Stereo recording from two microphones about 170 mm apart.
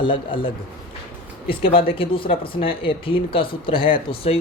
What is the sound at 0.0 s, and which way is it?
Speech, 30° left (ahead or behind).